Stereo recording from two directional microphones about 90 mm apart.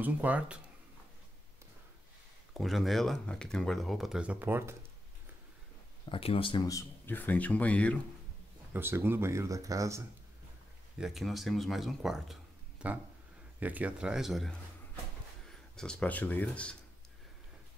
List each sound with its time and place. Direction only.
0.0 s speech: 15° right (ahead or behind)
2.5 s speech: centre (ahead or behind); by 4.7 s 25° right (ahead or behind)
6.0 s speech: 90° left
6.6 s speech: 40° left (ahead or behind)
7.1 s speech: 20° left (ahead or behind)
8.7 s speech: 25° right (ahead or behind)
11.0 s speech: centre (ahead or behind)
13.6 s speech: 15° right (ahead or behind); by 14.5 s centre (ahead or behind)
15.7 s speech: 10° left (ahead or behind)